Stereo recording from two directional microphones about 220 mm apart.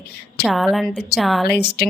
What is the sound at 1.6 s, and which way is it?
Speech, 45° left (ahead or behind).